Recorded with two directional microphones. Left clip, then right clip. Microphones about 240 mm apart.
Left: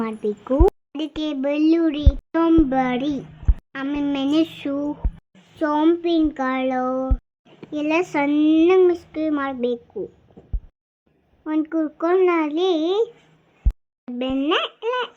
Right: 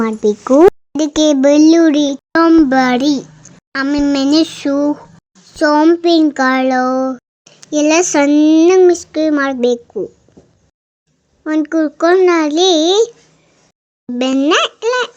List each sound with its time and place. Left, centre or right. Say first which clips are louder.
0.0 s a child's voice: right 11 dB; right
11.4 s a child's voice: right 8 dB; centre
14.2 s a child's voice: right 9 dB; right